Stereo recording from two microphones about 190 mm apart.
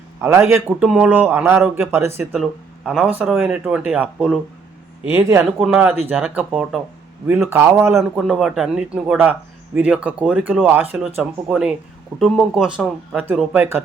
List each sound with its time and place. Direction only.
0.2 s a man's voice: 15° right (ahead or behind)
2.3 s a man's voice: centre (ahead or behind)